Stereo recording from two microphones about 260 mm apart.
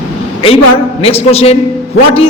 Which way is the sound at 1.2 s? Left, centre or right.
Left.